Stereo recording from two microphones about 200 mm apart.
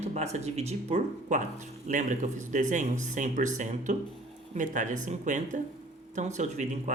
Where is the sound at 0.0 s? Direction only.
35° right (ahead or behind).